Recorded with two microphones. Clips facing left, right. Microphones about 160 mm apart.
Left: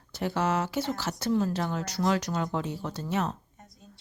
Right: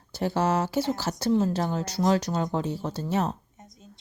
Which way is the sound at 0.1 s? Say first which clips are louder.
Right 3 dB; 35° right (ahead or behind).